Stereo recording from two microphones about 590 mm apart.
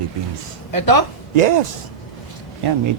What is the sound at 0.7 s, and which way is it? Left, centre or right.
Speech, left.